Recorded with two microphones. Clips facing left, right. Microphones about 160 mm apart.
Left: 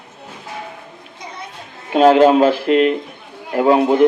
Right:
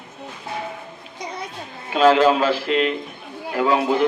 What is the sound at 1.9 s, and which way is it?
Speech, 50° left (ahead or behind).